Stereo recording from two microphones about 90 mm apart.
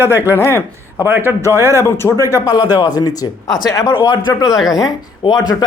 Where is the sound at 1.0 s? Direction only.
25° right (ahead or behind).